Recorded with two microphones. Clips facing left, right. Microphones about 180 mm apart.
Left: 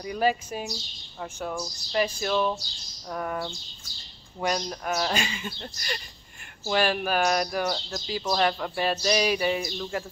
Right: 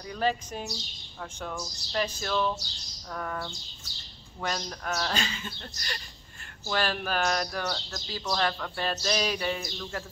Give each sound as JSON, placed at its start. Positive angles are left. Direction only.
{"t": 0.0, "sound": "speech", "side_deg": 10}